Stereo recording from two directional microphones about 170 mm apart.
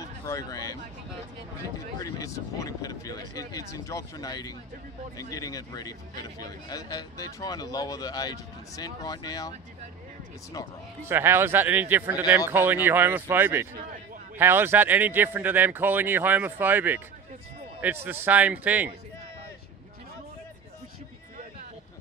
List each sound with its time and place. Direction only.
0.0 s speech: 20° left (ahead or behind)
2.0 s speech: 20° left (ahead or behind)
11.1 s speech: 15° right (ahead or behind)